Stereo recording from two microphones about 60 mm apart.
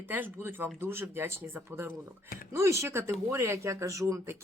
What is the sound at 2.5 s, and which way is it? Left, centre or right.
Speech, right.